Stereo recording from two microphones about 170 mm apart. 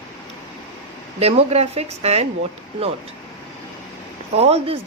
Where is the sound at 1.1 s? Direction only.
40° right (ahead or behind).